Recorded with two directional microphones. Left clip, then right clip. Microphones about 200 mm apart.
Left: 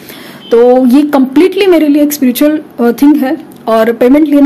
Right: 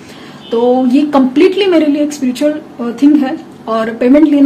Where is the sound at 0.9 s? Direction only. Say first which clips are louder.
Left 2 dB; 50° left (ahead or behind).